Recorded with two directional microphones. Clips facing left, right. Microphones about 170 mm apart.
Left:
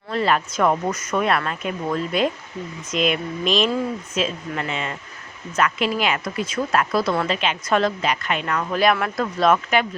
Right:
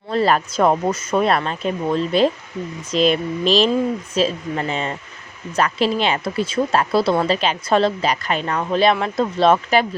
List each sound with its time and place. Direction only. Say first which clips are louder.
0.1 s speech: right 3 dB; 35° right (ahead or behind)